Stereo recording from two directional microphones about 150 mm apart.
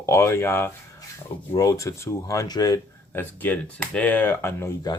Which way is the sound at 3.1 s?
15° left (ahead or behind).